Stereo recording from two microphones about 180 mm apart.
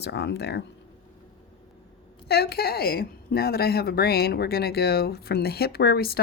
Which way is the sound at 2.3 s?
60° left (ahead or behind).